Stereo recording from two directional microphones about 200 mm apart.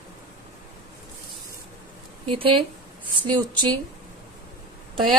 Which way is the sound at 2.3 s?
25° right (ahead or behind).